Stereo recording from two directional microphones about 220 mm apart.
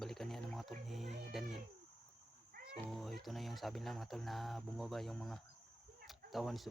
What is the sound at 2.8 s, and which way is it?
Speech, centre (ahead or behind).